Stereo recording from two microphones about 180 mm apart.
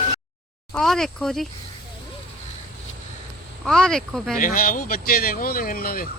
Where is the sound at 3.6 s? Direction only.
5° left (ahead or behind).